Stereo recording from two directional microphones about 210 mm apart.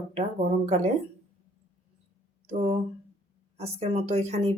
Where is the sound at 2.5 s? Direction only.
30° right (ahead or behind).